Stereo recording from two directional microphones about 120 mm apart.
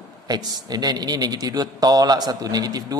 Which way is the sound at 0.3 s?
35° right (ahead or behind).